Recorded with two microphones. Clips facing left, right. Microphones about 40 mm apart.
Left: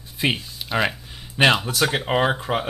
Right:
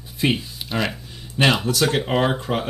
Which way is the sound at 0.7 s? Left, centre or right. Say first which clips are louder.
Left 2 dB; centre.